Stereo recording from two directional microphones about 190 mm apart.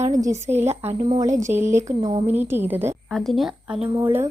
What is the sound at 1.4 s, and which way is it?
A woman's voice, 10° right (ahead or behind).